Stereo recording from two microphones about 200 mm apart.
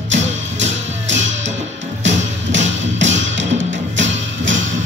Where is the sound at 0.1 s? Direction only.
65° right (ahead or behind).